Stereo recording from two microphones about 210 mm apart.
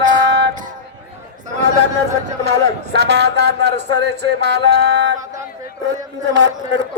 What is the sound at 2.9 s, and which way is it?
Music, 55° right (ahead or behind).